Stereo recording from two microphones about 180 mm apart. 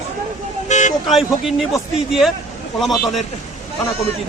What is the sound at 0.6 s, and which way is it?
Vehicle, 40° left (ahead or behind).